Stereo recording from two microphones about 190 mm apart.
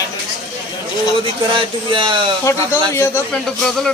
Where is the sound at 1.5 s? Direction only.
25° right (ahead or behind).